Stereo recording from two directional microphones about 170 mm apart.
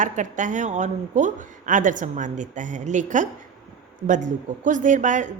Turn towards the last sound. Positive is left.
turn(degrees=-45)  # may be behind; listen again after turning